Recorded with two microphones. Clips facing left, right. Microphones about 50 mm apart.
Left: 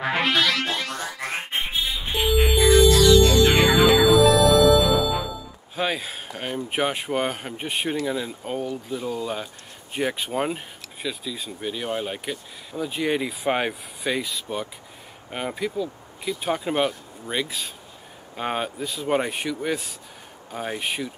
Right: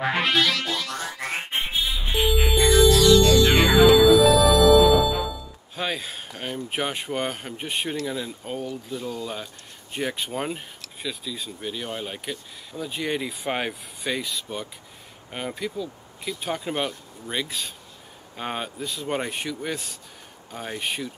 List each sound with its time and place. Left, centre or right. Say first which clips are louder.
0.0 s music: even; centre
3.3 s music: even; left
3.5 s music: right 1 dB; centre
5.8 s speech: left 3 dB; centre